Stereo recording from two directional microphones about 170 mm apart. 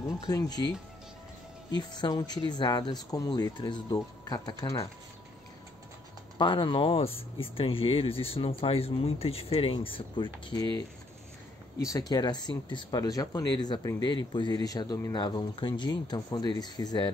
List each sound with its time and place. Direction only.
0.3 s speech: 25° left (ahead or behind)
1.7 s speech: 25° left (ahead or behind)
6.3 s speech: 25° left (ahead or behind)
11.8 s speech: 20° left (ahead or behind)